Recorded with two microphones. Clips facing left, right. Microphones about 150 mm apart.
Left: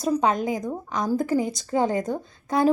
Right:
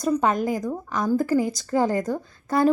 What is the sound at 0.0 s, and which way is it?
A woman's voice, centre (ahead or behind).